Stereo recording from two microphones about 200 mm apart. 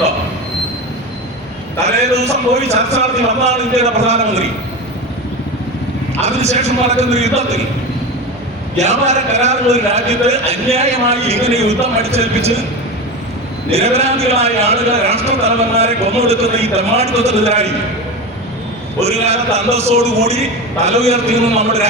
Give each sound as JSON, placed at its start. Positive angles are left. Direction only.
{"t": 2.1, "sound": "a man's voice", "side_deg": -35}
{"t": 6.2, "sound": "a man's voice", "side_deg": -35}
{"t": 8.8, "sound": "a man's voice", "side_deg": -35}
{"t": 13.7, "sound": "a man's voice", "side_deg": -30}
{"t": 18.9, "sound": "a man's voice", "side_deg": -30}